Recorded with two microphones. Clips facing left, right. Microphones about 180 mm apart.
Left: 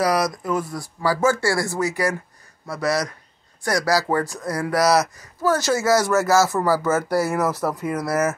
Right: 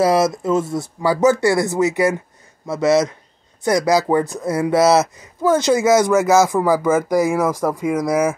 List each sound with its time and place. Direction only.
0.0 s speech: 25° right (ahead or behind)